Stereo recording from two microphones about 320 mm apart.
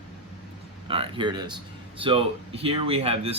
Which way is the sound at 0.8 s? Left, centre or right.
Centre.